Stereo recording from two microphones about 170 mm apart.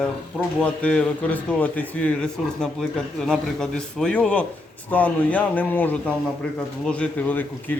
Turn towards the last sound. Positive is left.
turn(degrees=10)  # may be behind; listen again after turning